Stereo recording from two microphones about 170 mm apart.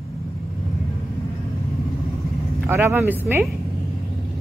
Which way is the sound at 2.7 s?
15° right (ahead or behind).